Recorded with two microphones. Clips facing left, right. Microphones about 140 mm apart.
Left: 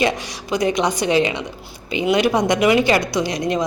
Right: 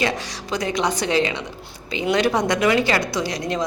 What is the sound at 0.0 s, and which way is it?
A woman's voice, 15° left (ahead or behind).